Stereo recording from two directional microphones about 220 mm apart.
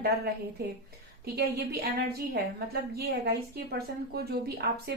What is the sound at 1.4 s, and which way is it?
A woman's voice, 45° right (ahead or behind).